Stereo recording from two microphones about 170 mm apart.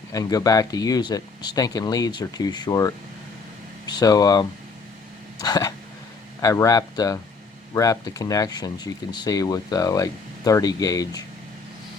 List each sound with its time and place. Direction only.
0.1 s speech: 20° left (ahead or behind)